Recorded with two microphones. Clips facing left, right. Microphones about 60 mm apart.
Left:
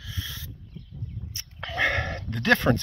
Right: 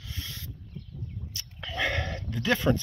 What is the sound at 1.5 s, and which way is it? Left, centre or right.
Dog, left.